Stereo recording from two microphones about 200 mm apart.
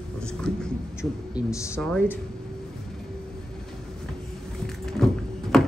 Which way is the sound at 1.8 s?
5° left (ahead or behind).